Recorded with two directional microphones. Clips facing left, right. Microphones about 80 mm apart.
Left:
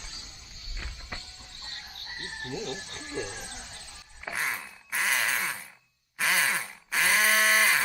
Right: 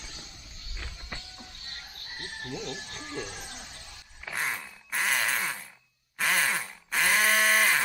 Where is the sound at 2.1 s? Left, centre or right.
Left.